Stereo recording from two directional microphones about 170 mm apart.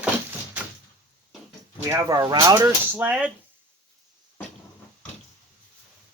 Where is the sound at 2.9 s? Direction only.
10° right (ahead or behind).